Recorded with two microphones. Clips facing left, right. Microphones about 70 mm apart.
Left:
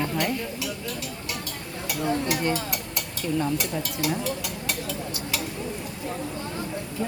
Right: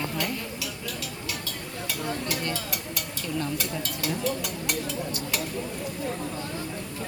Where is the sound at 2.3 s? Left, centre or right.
Left.